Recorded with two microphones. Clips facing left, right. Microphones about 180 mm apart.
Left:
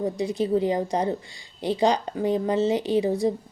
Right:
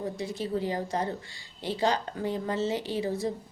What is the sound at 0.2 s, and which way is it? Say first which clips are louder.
A woman's voice: left 9 dB; 15° left (ahead or behind).